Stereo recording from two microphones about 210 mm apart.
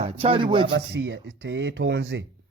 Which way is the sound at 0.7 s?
60° right (ahead or behind).